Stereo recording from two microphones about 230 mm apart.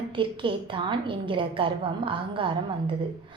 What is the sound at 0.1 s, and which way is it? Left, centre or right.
A woman's voice, right.